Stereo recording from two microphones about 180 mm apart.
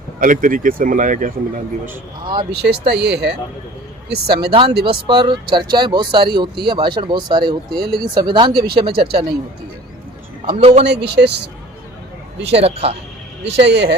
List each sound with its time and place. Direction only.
0.2 s speech: 50° right (ahead or behind)
2.2 s speech: 25° right (ahead or behind)
2.6 s speech: 65° right (ahead or behind)
5.0 s speech: 25° right (ahead or behind)
8.5 s speech: 60° right (ahead or behind)
10.4 s a man's voice: 30° right (ahead or behind)
10.8 s speech: 70° right (ahead or behind)
12.5 s a man's voice: 35° right (ahead or behind)
13.6 s speech: 70° right (ahead or behind)